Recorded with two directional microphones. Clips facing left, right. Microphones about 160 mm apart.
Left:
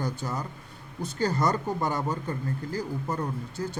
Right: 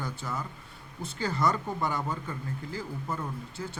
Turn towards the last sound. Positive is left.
turn(degrees=40)  # may be behind; listen again after turning